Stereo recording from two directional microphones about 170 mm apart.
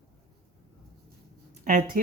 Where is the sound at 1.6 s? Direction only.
55° right (ahead or behind).